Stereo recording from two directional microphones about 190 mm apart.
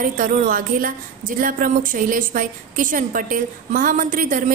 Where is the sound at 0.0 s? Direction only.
45° right (ahead or behind).